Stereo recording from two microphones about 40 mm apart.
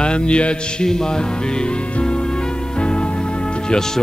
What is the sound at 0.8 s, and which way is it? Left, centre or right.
Music, centre.